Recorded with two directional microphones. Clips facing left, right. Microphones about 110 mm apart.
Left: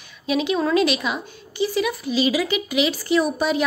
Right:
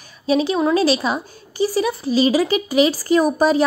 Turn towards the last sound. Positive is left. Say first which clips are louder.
# right 5 dB
turn(degrees=-40)  # may be behind; listen again after turning